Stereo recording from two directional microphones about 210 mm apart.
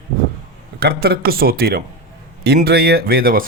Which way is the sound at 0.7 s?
50° right (ahead or behind).